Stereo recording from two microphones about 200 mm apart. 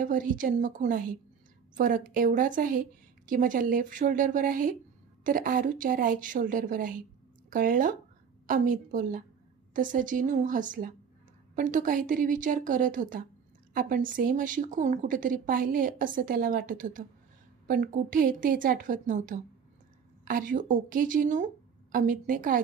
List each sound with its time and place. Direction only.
0.0 s a woman's voice: 40° right (ahead or behind)